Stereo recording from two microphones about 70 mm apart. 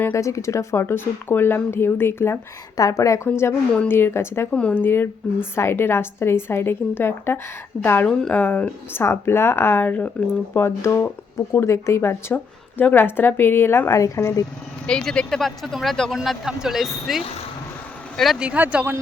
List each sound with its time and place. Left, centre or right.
0.1 s a woman's voice: left
2.7 s speech: left
3.4 s a woman's voice: left
8.9 s a woman's voice: left
10.5 s a woman's voice: left
12.3 s a woman's voice: left
14.0 s speech: left
14.8 s speech: centre
18.3 s speech: centre